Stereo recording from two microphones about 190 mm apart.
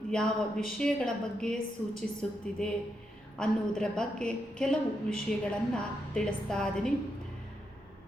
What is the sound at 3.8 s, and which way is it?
A woman's voice, 5° left (ahead or behind).